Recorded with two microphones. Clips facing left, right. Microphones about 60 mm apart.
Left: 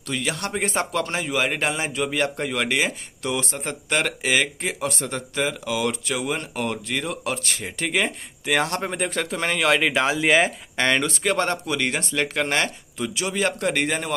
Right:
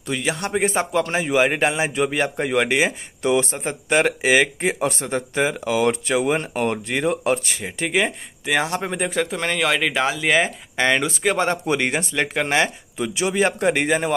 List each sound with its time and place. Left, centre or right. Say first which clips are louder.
0.0 s speech: right 3 dB; centre
7.4 s speech: right 2 dB; centre
11.6 s speech: right 4 dB; right
11.9 s speech: right 2 dB; centre